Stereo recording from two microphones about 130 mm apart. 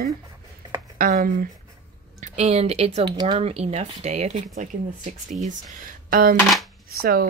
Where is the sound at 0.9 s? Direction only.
90° right.